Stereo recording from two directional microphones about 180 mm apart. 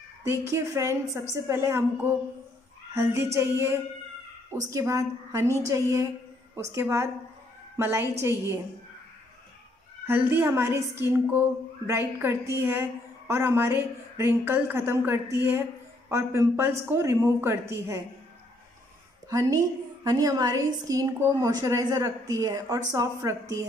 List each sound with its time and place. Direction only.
0.3 s a woman's voice: 15° right (ahead or behind)
10.0 s a woman's voice: 10° right (ahead or behind)
19.2 s a woman's voice: 20° right (ahead or behind)